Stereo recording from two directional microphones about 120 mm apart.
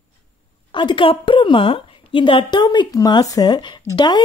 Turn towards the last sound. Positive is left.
turn(degrees=40)  # may be behind; listen again after turning